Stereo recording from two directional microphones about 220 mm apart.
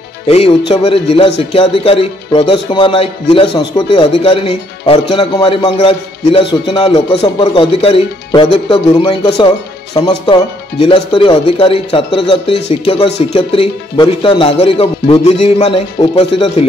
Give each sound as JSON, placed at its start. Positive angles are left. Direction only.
{"t": 0.3, "sound": "speech", "side_deg": 25}